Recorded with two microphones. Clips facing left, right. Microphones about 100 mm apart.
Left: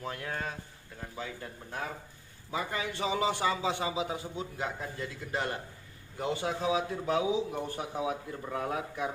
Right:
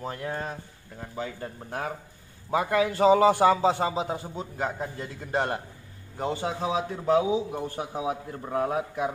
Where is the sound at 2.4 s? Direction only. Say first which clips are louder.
Right 10 dB; 60° right (ahead or behind).